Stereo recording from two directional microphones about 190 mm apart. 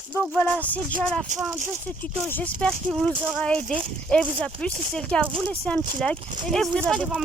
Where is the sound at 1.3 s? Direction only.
40° right (ahead or behind).